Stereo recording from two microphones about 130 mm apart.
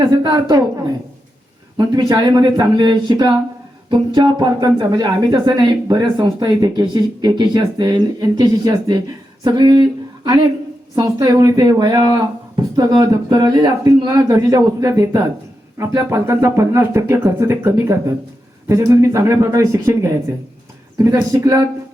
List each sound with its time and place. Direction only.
0.1 s speech: 30° right (ahead or behind)
1.8 s speech: 30° right (ahead or behind)
10.9 s speech: 30° right (ahead or behind)